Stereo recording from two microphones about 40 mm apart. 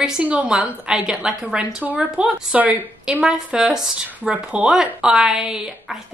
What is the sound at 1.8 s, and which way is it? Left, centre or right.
A woman's voice, right.